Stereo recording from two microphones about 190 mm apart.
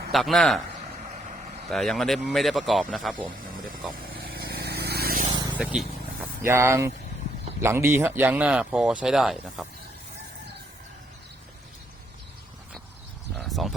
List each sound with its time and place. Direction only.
0.1 s speech: centre (ahead or behind)
1.1 s vehicle: 40° right (ahead or behind)
1.7 s speech: centre (ahead or behind)
3.9 s vehicle: 50° right (ahead or behind)
5.5 s speech: 5° right (ahead or behind)
13.3 s a sound: centre (ahead or behind)